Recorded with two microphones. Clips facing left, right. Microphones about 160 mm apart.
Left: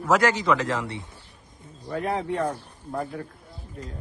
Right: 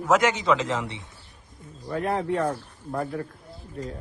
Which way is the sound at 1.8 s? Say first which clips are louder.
Right 1 dB; centre (ahead or behind).